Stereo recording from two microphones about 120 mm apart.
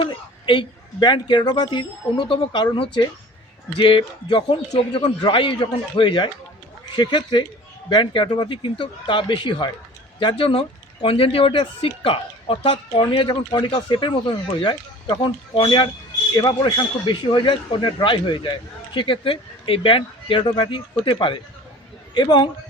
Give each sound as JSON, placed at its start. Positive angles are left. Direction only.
{"t": 0.0, "sound": "a man's voice", "side_deg": 45}